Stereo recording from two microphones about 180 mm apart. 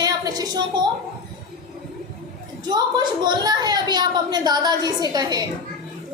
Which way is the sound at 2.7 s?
25° right (ahead or behind).